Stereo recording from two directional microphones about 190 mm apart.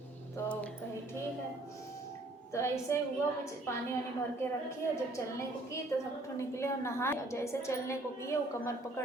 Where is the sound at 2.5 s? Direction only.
15° left (ahead or behind).